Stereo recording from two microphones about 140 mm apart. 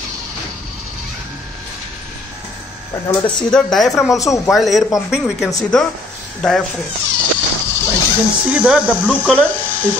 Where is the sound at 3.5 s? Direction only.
5° left (ahead or behind).